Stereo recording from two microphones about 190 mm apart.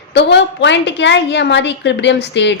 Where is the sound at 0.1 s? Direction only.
65° left (ahead or behind).